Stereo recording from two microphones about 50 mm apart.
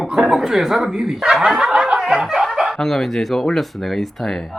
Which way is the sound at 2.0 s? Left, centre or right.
Centre.